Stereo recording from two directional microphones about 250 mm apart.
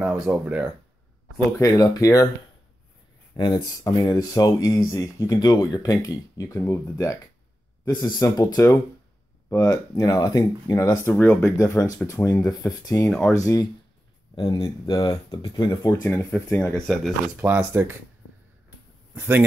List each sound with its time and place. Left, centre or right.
0.0 s speech: centre
1.6 s speech: centre
3.3 s speech: centre
9.5 s speech: centre
19.1 s speech: centre